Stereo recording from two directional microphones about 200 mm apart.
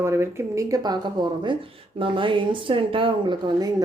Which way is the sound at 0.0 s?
15° right (ahead or behind).